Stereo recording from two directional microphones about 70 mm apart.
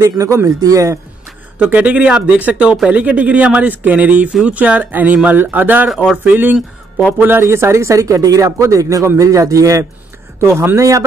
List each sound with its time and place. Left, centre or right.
0.0 s speech: right
1.6 s speech: centre
7.4 s speech: right
10.4 s speech: right
10.8 s speech: right